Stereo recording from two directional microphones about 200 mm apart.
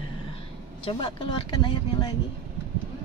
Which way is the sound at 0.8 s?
25° left (ahead or behind).